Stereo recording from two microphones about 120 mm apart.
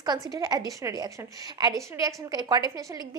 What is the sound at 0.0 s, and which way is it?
A woman's voice, 35° right (ahead or behind).